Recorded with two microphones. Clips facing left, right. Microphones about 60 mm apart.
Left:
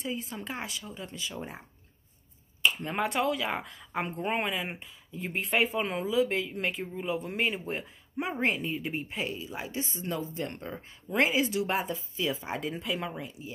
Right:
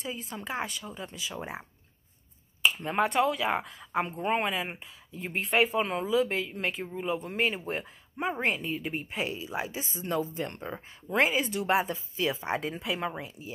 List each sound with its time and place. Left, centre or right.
0.0 s speech: centre
2.6 s speech: centre